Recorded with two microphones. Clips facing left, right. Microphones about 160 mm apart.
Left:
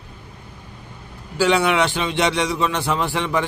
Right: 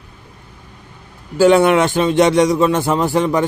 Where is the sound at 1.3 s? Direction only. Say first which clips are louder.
Right 7 dB; 50° right (ahead or behind).